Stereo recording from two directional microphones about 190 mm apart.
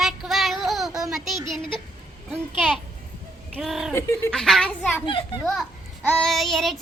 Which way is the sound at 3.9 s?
15° left (ahead or behind).